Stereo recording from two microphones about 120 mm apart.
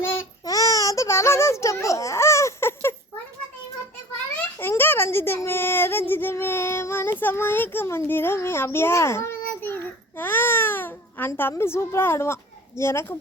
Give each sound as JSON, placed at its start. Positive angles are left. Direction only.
{"t": 0.0, "sound": "child singing", "side_deg": 20}
{"t": 0.4, "sound": "baby cry", "side_deg": 30}
{"t": 4.5, "sound": "speech", "side_deg": 20}